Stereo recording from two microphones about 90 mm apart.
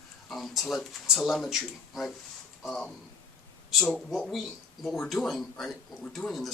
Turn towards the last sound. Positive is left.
turn(degrees=0)  # may be behind; listen again after turning